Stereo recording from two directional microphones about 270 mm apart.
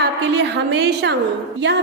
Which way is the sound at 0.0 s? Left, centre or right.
Right.